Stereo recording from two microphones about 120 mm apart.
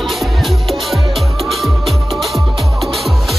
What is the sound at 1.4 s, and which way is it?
Music, centre (ahead or behind).